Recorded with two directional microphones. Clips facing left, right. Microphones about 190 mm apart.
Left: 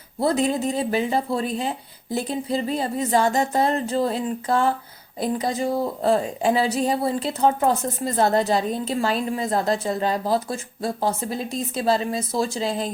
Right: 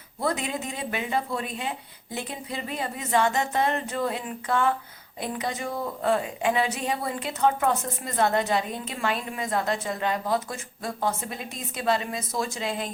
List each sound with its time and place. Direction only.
0.2 s a woman's voice: 35° left (ahead or behind)